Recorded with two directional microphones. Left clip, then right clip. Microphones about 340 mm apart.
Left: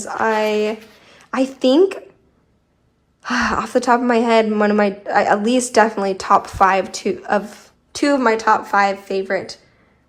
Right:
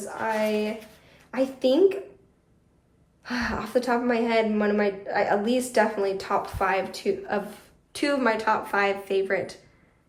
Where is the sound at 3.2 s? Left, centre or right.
Left.